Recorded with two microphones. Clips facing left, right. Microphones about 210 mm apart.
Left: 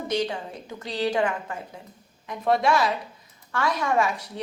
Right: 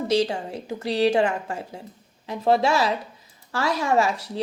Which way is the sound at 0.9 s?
25° right (ahead or behind).